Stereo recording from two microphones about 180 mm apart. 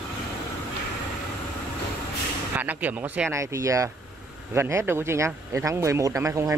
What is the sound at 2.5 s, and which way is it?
Speech, 10° right (ahead or behind).